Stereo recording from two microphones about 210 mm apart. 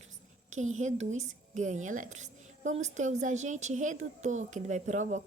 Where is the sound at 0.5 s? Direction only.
35° right (ahead or behind).